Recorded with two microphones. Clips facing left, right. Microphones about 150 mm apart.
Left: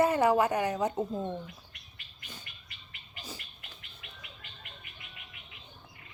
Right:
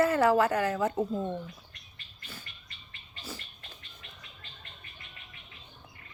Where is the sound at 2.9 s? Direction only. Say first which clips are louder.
Right 2 dB; 15° left (ahead or behind).